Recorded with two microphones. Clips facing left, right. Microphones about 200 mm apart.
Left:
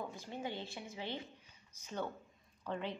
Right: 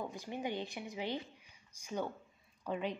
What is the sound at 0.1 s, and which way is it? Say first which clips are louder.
A woman's voice: right 3 dB; 15° right (ahead or behind).